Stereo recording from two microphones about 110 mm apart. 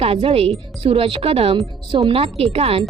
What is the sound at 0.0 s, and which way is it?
A woman's voice, 60° right (ahead or behind).